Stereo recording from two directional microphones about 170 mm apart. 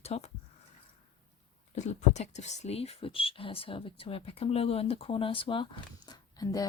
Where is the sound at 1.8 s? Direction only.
40° left (ahead or behind).